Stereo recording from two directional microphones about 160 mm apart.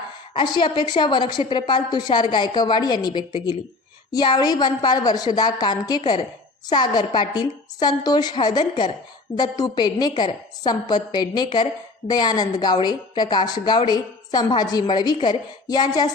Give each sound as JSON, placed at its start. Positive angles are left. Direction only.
{"t": 0.3, "sound": "a woman's voice", "side_deg": 30}